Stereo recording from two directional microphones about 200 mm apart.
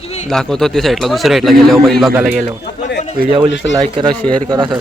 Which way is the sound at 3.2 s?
45° right (ahead or behind).